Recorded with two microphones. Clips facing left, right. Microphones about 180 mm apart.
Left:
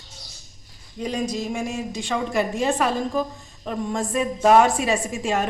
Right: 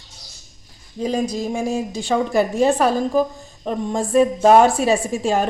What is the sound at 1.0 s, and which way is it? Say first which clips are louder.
A woman's voice: right 4 dB; 30° right (ahead or behind).